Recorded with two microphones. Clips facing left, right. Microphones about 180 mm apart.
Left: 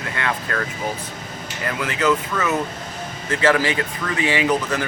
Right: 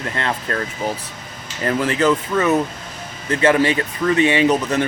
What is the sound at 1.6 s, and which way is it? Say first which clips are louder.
Speech: right 4 dB; 30° right (ahead or behind).